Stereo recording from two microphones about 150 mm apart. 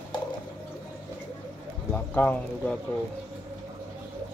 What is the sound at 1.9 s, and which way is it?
Speech, 10° left (ahead or behind).